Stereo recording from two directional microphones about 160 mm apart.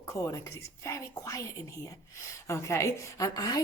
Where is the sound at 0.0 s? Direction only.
20° left (ahead or behind).